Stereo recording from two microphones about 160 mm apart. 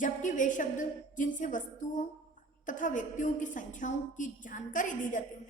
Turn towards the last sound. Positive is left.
turn(degrees=55)  # may be behind; listen again after turning